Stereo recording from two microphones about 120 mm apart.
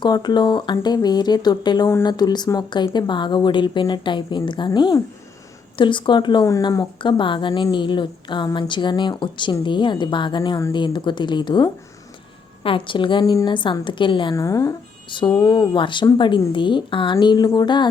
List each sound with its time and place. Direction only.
0.0 s a woman's voice: 35° left (ahead or behind)
14.3 s speech: 25° left (ahead or behind)
15.4 s a woman's voice: 40° left (ahead or behind)